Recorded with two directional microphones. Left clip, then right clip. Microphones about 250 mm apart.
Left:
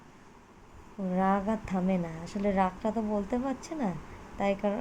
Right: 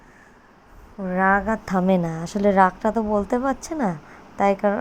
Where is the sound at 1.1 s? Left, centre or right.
Centre.